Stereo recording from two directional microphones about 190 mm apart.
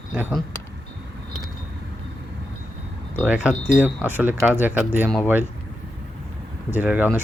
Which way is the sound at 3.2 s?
5° right (ahead or behind).